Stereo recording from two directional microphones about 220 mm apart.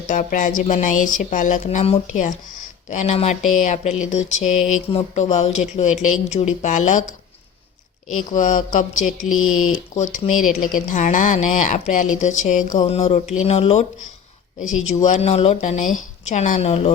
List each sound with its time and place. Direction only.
0.1 s speech: 35° left (ahead or behind)
8.3 s speech: 35° left (ahead or behind)
9.3 s speech: 70° left (ahead or behind)
9.9 s speech: 35° left (ahead or behind)
12.7 s music: 25° left (ahead or behind)
14.8 s speech: 35° left (ahead or behind)